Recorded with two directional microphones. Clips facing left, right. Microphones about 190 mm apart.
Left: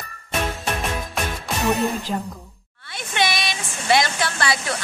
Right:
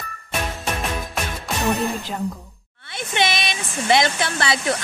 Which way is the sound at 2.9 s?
20° right (ahead or behind).